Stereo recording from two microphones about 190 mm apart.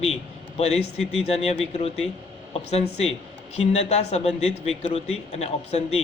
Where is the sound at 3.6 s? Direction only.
35° left (ahead or behind).